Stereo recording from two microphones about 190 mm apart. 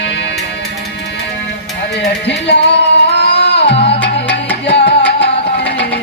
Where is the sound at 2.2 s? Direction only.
65° left (ahead or behind).